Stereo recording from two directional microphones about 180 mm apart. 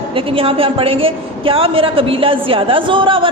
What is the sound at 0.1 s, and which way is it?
A woman's voice, 30° right (ahead or behind).